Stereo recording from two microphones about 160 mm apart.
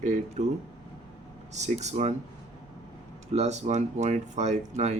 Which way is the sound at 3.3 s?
45° right (ahead or behind).